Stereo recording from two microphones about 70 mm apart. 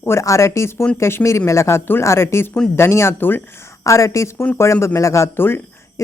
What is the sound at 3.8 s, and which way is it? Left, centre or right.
A woman's voice, left.